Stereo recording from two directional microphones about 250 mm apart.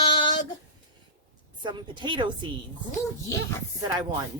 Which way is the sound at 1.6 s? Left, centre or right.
Centre.